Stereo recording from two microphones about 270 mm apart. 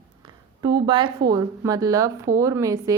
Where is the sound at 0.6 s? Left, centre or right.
Centre.